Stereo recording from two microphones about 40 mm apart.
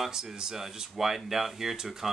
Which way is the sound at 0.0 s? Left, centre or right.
Centre.